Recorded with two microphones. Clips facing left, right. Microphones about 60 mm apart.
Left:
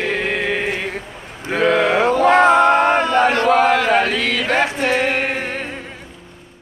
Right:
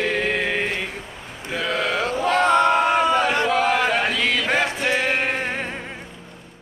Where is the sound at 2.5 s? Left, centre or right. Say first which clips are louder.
Left 4 dB; left.